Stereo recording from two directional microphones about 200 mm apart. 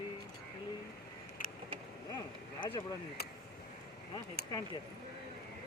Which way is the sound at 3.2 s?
50° left (ahead or behind).